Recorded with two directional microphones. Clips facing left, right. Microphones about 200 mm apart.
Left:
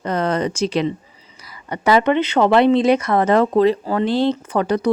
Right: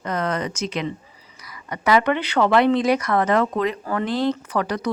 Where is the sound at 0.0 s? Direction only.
30° left (ahead or behind).